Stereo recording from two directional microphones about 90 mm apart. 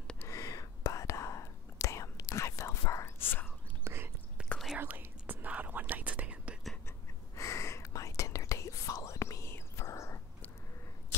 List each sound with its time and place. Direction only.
0.2 s whispering: 35° left (ahead or behind)
3.2 s whispering: 25° left (ahead or behind)
3.8 s whispering: 30° right (ahead or behind)
4.4 s whispering: 10° right (ahead or behind)
7.3 s whispering: 35° left (ahead or behind)